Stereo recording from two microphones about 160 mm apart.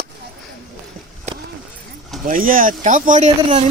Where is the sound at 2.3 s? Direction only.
60° right (ahead or behind).